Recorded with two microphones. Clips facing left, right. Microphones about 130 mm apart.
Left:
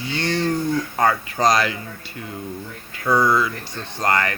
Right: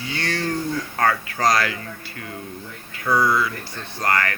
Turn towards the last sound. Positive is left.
turn(degrees=20)  # may be behind; listen again after turning